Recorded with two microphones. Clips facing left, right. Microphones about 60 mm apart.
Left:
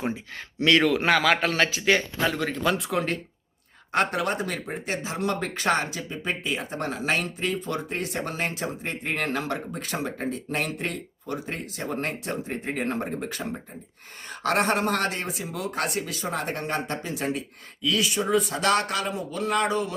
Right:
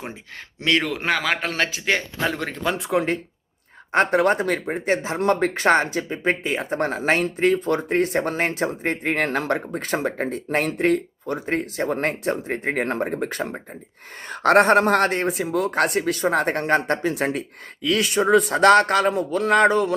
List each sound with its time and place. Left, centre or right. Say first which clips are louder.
0.6 s speech: left 2 dB; right
3.9 s speech: right 7 dB; right